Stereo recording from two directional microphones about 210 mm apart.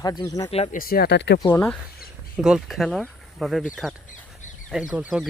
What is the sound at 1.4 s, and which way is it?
Speech, 15° left (ahead or behind).